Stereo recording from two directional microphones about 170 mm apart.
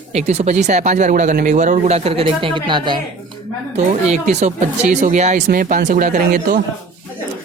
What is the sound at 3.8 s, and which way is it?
Speech, 45° right (ahead or behind).